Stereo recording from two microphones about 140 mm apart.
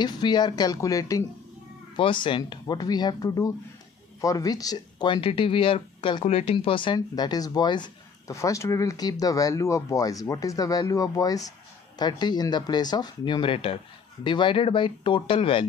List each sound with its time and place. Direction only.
0.0 s speech: 30° left (ahead or behind)
2.0 s speech: 35° left (ahead or behind)